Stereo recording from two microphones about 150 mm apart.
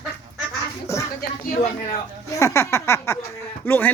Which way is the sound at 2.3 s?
20° left (ahead or behind).